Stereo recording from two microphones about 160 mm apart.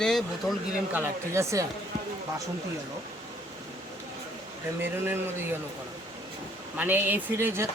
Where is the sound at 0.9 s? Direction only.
15° right (ahead or behind).